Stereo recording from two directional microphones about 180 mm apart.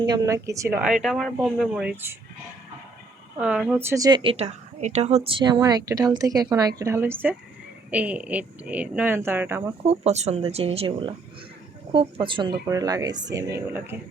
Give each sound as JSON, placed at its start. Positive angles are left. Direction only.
{"t": 0.0, "sound": "speech", "side_deg": -20}
{"t": 0.8, "sound": "speech", "side_deg": 0}
{"t": 3.3, "sound": "speech", "side_deg": -5}
{"t": 5.4, "sound": "speech", "side_deg": -25}
{"t": 9.8, "sound": "speech", "side_deg": -35}